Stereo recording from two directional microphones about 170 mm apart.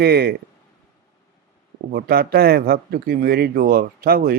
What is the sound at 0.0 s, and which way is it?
Speech, 65° right (ahead or behind).